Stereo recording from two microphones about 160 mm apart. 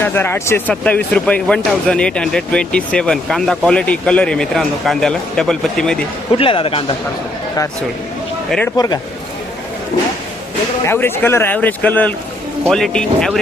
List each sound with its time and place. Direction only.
0.0 s a man's voice: 15° left (ahead or behind)
6.3 s speech: 35° left (ahead or behind)
8.4 s speech: 5° left (ahead or behind)
10.8 s a man's voice: 15° left (ahead or behind)